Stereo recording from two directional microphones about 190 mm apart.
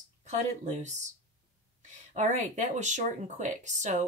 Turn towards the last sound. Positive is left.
turn(degrees=-40)  # may be behind; listen again after turning